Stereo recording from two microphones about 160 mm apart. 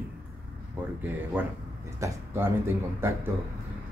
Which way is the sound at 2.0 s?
15° right (ahead or behind).